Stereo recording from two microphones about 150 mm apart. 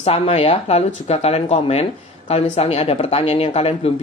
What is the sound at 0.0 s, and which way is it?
Speech, 45° left (ahead or behind).